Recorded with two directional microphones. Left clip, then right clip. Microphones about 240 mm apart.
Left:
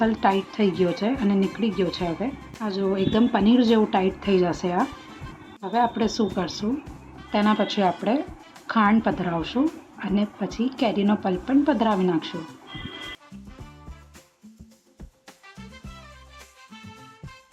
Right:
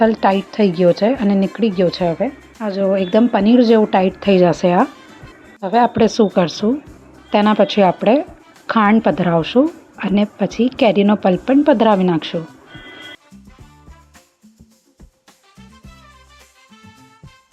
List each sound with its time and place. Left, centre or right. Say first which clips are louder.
0.0 s speech: right 8 dB; right